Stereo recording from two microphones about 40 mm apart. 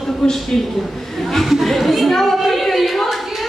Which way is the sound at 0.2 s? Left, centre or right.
Centre.